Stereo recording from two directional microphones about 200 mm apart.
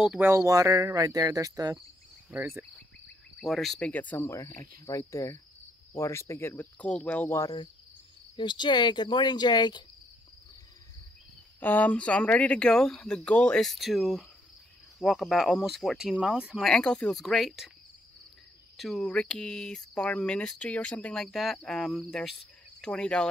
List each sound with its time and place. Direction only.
0.0 s speech: 5° right (ahead or behind)
3.3 s speech: centre (ahead or behind); by 9.8 s 20° left (ahead or behind)
11.6 s speech: 10° left (ahead or behind)
18.8 s speech: centre (ahead or behind)